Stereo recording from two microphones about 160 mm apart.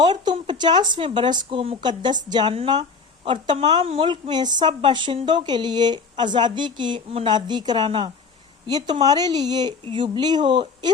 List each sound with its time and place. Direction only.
0.0 s speech: 30° right (ahead or behind)